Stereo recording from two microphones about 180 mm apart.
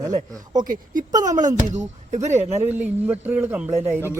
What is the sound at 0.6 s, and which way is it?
Speech, 50° right (ahead or behind).